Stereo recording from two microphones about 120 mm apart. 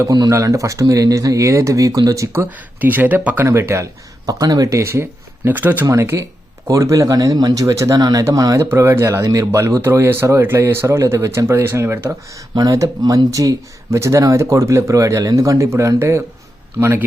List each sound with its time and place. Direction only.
0.1 s speech: 30° right (ahead or behind)